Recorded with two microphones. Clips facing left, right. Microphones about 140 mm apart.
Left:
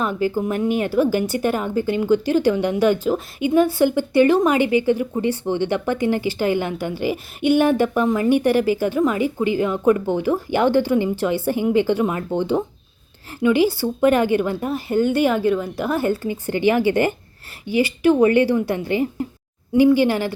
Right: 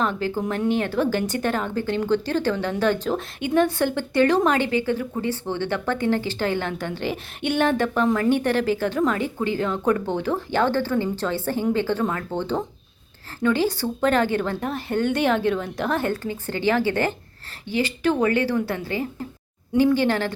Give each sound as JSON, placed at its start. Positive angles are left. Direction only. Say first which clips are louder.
{"t": 0.0, "sound": "speech", "louder": "left 3 dB", "side_deg": 10}